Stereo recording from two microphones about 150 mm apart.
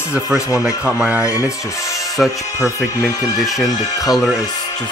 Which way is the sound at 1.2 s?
20° left (ahead or behind).